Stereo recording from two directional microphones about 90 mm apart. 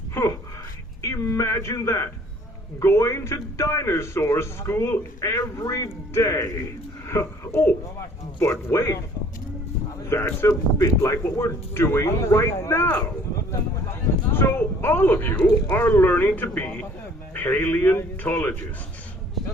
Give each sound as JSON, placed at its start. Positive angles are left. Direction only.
{"t": 0.1, "sound": "a sound", "side_deg": 30}
{"t": 1.0, "sound": "a man's voice", "side_deg": 35}
{"t": 10.1, "sound": "speech", "side_deg": 25}
{"t": 14.3, "sound": "speech", "side_deg": 25}